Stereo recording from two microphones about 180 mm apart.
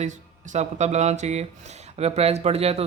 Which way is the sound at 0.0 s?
40° right (ahead or behind).